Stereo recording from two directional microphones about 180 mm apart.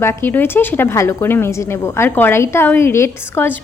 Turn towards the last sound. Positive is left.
turn(degrees=15)  # may be behind; listen again after turning